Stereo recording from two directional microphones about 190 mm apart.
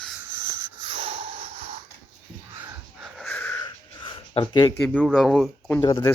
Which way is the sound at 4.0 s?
30° left (ahead or behind).